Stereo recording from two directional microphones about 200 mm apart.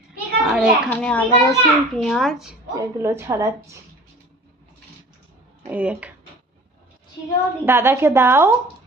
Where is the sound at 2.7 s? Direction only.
15° right (ahead or behind).